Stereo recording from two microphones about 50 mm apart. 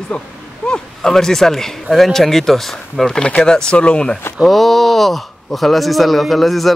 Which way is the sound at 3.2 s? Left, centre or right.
Left.